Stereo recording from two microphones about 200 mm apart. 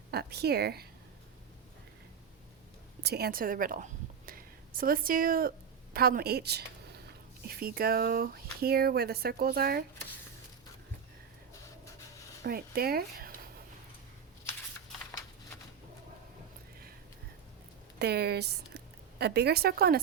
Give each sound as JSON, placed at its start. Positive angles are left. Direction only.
{"t": 0.1, "sound": "speech", "side_deg": -55}
{"t": 3.0, "sound": "a woman's voice", "side_deg": -55}
{"t": 12.4, "sound": "speech", "side_deg": -50}
{"t": 18.0, "sound": "speech", "side_deg": -55}